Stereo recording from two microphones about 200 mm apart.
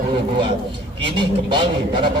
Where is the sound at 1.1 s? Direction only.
25° right (ahead or behind).